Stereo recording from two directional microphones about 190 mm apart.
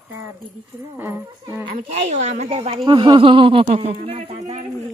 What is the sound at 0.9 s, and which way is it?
Speech, 10° right (ahead or behind).